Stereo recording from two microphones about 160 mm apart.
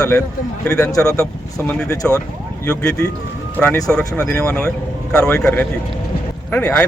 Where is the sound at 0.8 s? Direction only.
20° left (ahead or behind).